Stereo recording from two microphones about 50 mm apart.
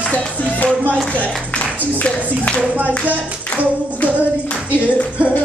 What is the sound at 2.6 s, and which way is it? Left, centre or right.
Clapping, right.